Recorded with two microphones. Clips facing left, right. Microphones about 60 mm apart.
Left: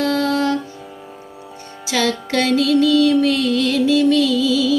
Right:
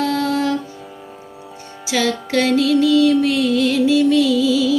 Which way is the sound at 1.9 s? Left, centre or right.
Centre.